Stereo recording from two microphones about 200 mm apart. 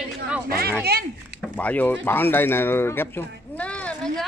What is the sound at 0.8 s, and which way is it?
Speech, 50° right (ahead or behind).